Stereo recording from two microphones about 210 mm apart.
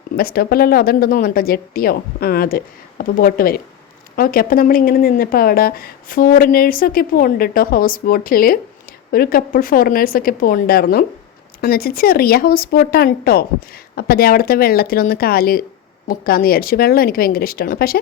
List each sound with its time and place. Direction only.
0.2 s speech: 45° left (ahead or behind)